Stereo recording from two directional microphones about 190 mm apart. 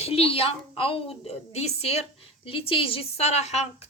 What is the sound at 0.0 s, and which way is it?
A woman's voice, 30° left (ahead or behind).